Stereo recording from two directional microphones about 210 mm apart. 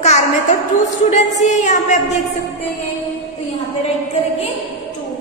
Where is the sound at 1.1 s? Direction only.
35° left (ahead or behind).